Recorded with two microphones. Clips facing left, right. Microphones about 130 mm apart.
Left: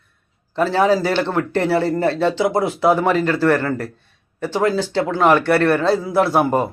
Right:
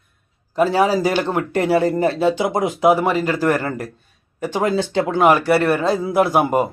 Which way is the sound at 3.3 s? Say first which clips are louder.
Left 2 dB; 15° right (ahead or behind).